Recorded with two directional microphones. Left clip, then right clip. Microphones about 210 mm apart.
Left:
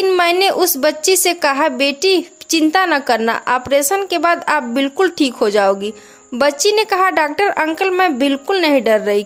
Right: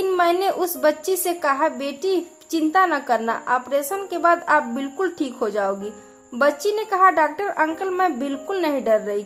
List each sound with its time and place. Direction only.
0.0 s a woman's voice: 35° left (ahead or behind)